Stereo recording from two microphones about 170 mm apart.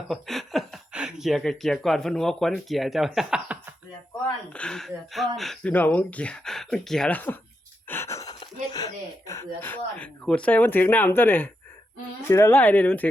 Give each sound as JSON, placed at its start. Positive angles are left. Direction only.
{"t": 0.1, "sound": "speech", "side_deg": 0}
{"t": 7.9, "sound": "wheeze", "side_deg": 15}
{"t": 8.7, "sound": "speech", "side_deg": 20}